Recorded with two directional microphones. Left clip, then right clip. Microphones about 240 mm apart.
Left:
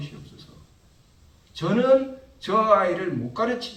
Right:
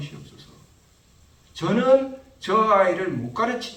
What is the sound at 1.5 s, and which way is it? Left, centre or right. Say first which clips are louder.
A man's voice: right 1 dB; centre.